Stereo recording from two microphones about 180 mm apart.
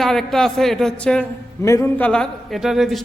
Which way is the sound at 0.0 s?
Centre (ahead or behind).